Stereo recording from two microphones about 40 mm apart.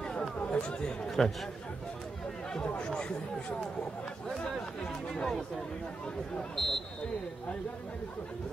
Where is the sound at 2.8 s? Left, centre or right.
Left.